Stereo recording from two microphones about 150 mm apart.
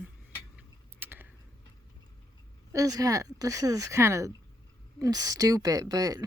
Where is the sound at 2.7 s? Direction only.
25° right (ahead or behind).